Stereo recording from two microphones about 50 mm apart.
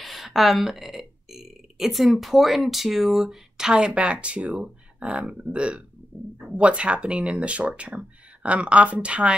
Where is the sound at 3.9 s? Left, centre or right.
Right.